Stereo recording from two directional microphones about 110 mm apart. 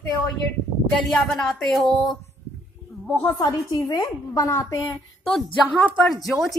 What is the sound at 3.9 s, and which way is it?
Speech, 35° left (ahead or behind).